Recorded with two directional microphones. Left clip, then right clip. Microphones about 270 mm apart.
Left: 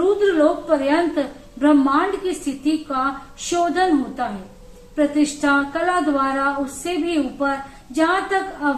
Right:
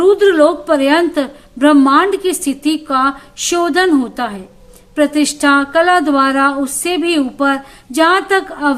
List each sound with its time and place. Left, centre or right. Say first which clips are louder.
0.2 s a woman's voice: right 7 dB; right